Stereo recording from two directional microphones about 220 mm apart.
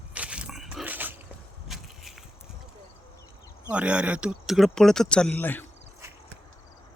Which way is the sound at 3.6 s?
5° right (ahead or behind).